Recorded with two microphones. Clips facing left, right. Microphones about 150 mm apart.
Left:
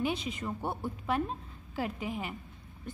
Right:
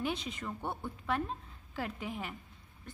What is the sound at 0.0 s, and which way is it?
Speech, 5° left (ahead or behind).